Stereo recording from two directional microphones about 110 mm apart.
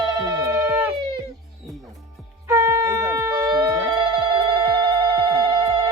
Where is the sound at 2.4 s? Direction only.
25° right (ahead or behind).